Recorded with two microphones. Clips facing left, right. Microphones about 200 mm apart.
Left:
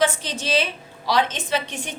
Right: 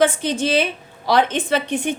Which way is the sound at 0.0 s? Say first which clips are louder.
Right 5 dB; 55° right (ahead or behind).